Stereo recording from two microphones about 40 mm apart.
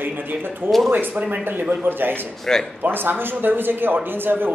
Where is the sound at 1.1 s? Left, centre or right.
Right.